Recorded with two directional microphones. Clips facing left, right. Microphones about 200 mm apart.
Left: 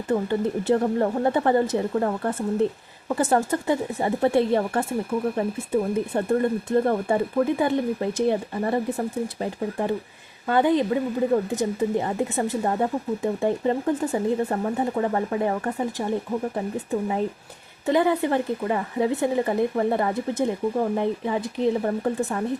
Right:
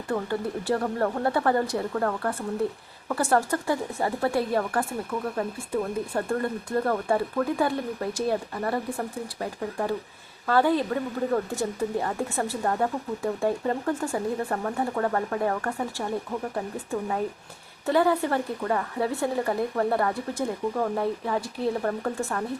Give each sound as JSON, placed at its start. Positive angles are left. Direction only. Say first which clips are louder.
{"t": 0.1, "sound": "speech", "louder": "left 5 dB", "side_deg": 20}